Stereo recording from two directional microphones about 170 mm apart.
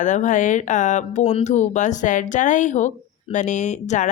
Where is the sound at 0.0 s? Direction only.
45° left (ahead or behind).